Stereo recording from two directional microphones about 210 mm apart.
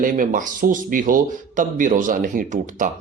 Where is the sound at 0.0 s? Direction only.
40° right (ahead or behind).